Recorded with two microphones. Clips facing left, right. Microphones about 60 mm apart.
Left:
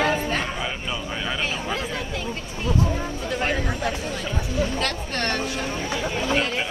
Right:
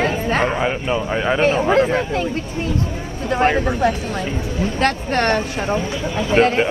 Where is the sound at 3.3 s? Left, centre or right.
Right.